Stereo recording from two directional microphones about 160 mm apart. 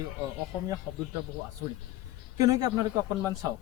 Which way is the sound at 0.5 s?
10° right (ahead or behind).